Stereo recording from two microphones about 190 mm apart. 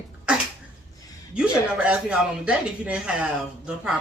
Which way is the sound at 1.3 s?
5° right (ahead or behind).